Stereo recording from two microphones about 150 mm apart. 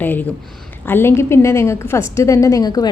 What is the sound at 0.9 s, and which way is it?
A woman's voice, 15° left (ahead or behind).